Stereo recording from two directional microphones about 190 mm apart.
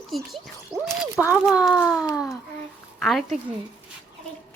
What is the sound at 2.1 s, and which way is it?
Speech, 20° left (ahead or behind).